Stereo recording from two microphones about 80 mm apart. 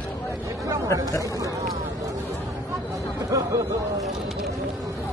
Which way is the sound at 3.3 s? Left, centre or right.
Right.